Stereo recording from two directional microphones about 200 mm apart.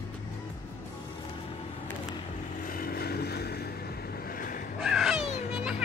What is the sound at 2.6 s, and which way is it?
Vehicle, 45° left (ahead or behind).